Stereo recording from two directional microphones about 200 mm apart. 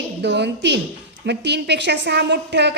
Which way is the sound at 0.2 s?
60° right (ahead or behind).